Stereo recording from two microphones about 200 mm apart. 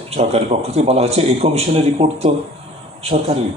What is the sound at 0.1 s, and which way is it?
A man's voice, 30° right (ahead or behind).